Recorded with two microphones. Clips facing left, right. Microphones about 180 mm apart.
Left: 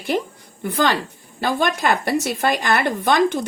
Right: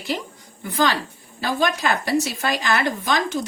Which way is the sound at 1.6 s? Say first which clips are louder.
Left 1 dB; 55° left (ahead or behind).